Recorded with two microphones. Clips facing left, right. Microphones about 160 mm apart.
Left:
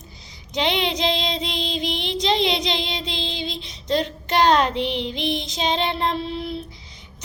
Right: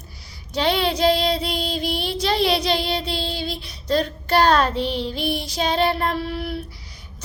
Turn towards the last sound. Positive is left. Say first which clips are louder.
# right 1 dB
turn(degrees=25)  # may be behind; listen again after turning